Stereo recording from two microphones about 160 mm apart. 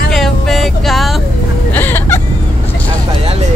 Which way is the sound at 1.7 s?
15° left (ahead or behind).